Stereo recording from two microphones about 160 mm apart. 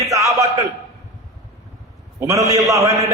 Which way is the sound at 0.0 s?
20° right (ahead or behind).